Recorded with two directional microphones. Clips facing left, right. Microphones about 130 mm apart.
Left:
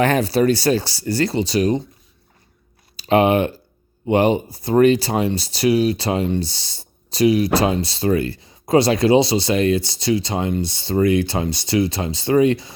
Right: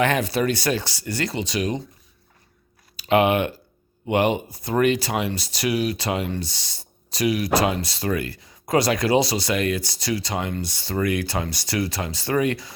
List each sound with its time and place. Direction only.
0.0 s speech: 35° left (ahead or behind)
2.9 s speech: 35° left (ahead or behind)